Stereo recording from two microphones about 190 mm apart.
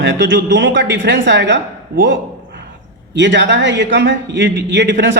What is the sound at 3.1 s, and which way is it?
Speech, 65° right (ahead or behind).